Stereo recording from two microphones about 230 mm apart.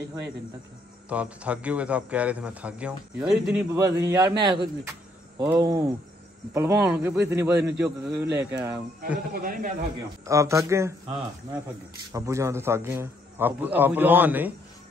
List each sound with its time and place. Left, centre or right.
1.0 s a man's voice: centre
9.3 s speech: right
10.2 s a man's voice: centre
12.1 s a man's voice: centre